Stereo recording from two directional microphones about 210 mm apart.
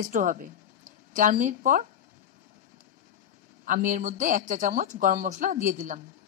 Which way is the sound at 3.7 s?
40° right (ahead or behind).